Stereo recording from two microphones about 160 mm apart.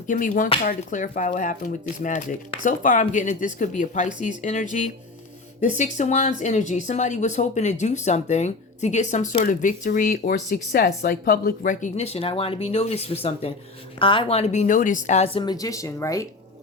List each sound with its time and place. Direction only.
0.1 s speech: 55° left (ahead or behind); by 16.2 s 20° left (ahead or behind)